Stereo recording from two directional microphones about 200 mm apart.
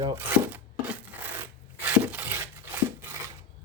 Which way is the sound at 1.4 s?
10° right (ahead or behind).